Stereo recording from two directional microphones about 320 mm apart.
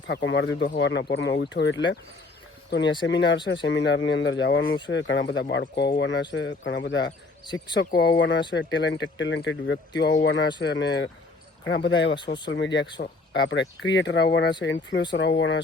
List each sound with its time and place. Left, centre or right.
0.1 s speech: left